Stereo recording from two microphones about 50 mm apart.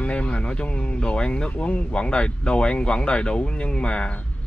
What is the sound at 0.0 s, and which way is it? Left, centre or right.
A man's voice, left.